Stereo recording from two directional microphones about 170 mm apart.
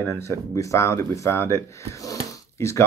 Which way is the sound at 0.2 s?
15° left (ahead or behind).